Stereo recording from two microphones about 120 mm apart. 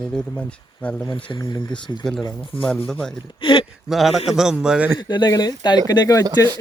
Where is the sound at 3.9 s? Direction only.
Centre (ahead or behind).